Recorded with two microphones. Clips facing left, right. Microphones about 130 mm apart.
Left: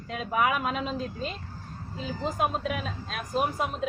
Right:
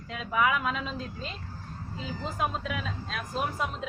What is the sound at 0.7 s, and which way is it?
Speech, 20° left (ahead or behind).